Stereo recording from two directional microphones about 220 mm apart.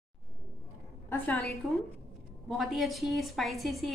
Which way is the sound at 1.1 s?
10° left (ahead or behind).